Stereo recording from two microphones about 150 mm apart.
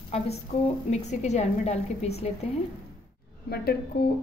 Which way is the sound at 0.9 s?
50° left (ahead or behind).